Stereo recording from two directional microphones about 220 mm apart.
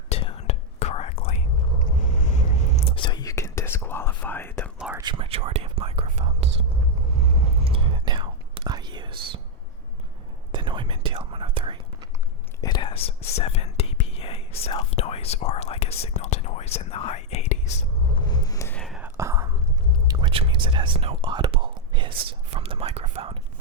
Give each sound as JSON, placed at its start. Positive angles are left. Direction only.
{"t": 0.1, "sound": "whispering", "side_deg": 25}
{"t": 4.8, "sound": "whispering", "side_deg": -5}
{"t": 5.0, "sound": "whispering", "side_deg": -20}
{"t": 10.5, "sound": "whispering", "side_deg": -20}
{"t": 12.6, "sound": "whispering", "side_deg": 20}
{"t": 18.3, "sound": "a sound", "side_deg": 15}
{"t": 18.8, "sound": "whispering", "side_deg": 0}